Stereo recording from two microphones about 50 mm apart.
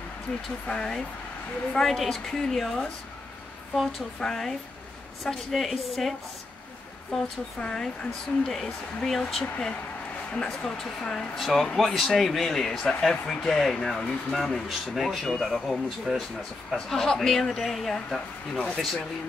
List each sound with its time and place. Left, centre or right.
0.7 s speech: centre
1.7 s speech: centre
9.4 s speech: centre
16.7 s speech: centre